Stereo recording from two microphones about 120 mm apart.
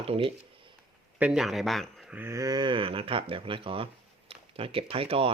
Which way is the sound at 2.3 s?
35° right (ahead or behind).